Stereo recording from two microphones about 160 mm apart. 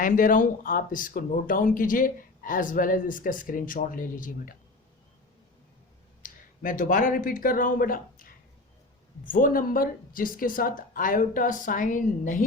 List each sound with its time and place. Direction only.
0.0 s speech: 55° left (ahead or behind)
6.2 s speech: 55° left (ahead or behind)